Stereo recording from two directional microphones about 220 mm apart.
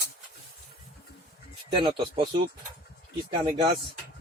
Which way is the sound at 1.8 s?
25° right (ahead or behind).